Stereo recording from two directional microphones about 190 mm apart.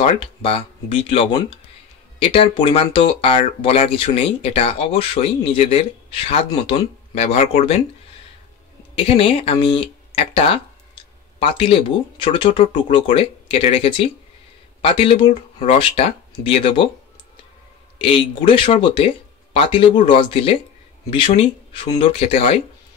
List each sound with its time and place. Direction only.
0.0 s speech: 35° left (ahead or behind)
9.0 s speech: 30° left (ahead or behind)
17.9 s speech: 30° left (ahead or behind)